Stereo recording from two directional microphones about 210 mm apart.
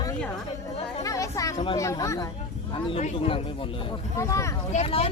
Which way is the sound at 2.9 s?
30° left (ahead or behind).